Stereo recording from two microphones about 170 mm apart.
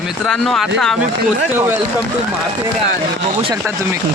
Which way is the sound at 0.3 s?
5° left (ahead or behind).